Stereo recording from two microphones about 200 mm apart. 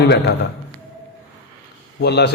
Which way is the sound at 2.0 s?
55° left (ahead or behind).